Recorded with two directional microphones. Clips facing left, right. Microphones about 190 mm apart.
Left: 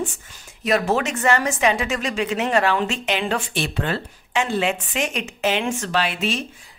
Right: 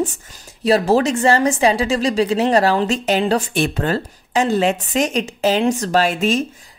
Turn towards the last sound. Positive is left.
turn(degrees=-45)  # may be behind; listen again after turning